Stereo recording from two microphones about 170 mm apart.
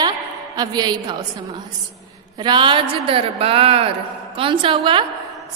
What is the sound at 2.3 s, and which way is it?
A woman's voice, 25° right (ahead or behind).